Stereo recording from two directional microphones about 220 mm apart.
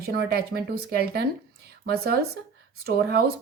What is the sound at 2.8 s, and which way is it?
Speech, 45° right (ahead or behind).